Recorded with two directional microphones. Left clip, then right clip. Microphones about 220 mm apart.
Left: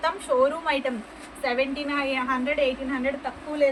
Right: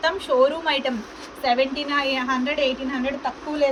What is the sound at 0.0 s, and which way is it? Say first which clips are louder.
Speech: right 3 dB; 40° left (ahead or behind).